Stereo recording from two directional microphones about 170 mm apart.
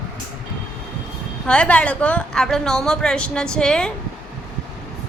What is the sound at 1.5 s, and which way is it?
A woman's voice, 5° left (ahead or behind).